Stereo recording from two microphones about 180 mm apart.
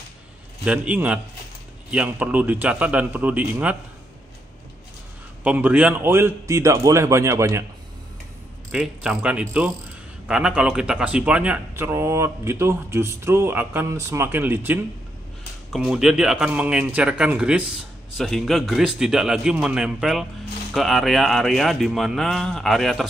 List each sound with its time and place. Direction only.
0.7 s speech: 5° right (ahead or behind)
5.4 s speech: 10° right (ahead or behind)
8.7 s a man's voice: 5° right (ahead or behind)